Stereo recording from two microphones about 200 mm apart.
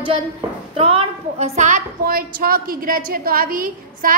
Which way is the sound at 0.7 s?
30° right (ahead or behind).